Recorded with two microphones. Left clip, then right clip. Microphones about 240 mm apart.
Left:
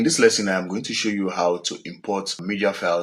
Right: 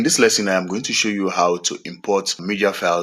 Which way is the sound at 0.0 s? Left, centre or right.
Right.